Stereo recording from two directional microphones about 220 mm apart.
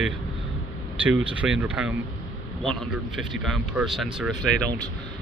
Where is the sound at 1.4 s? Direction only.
5° right (ahead or behind).